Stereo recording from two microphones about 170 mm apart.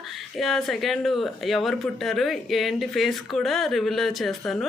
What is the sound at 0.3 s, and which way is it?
Speech, centre (ahead or behind).